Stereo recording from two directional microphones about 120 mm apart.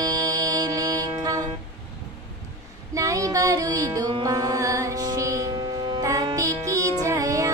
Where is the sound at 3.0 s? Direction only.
30° right (ahead or behind).